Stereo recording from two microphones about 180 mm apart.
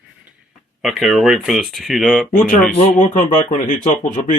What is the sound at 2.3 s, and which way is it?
Speech, 50° left (ahead or behind).